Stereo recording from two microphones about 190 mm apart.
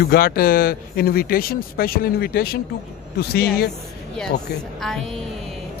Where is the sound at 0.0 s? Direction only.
55° left (ahead or behind).